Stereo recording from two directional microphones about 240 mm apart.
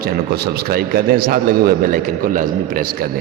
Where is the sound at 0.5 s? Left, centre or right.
Right.